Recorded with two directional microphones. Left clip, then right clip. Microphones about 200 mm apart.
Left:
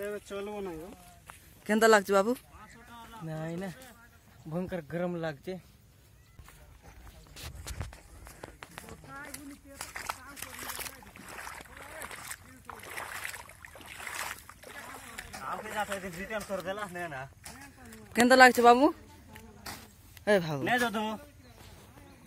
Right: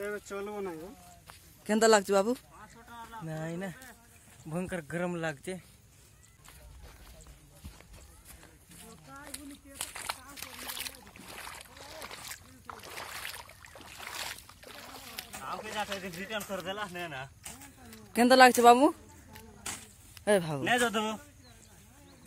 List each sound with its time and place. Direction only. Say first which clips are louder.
0.0 s speech: even; 20° left (ahead or behind)
1.7 s speech: left 1 dB; 10° right (ahead or behind)
2.9 s a sound: right 4 dB; 30° left (ahead or behind)
3.3 s speech: left 1 dB; 10° right (ahead or behind)
4.5 s speech: even; 5° right (ahead or behind)
9.8 s a sound: even; 5° right (ahead or behind)
11.1 s boat: left 1 dB; centre (ahead or behind)
11.7 s a sound: left 1 dB; 10° right (ahead or behind)
12.6 s boat: left 2 dB; 5° left (ahead or behind)
14.1 s boat: left 1 dB; 20° right (ahead or behind)
14.6 s boat: left 2 dB; 10° left (ahead or behind)
16.3 s speech: left 1 dB; 5° left (ahead or behind)
16.9 s a man's voice: left 1 dB; 10° right (ahead or behind)
20.9 s a man's voice: right 2 dB; 20° right (ahead or behind)